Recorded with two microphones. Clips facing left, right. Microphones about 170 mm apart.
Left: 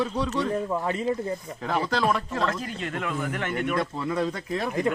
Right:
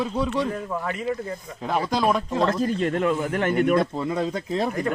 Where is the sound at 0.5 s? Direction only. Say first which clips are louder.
Left 2 dB; 30° left (ahead or behind).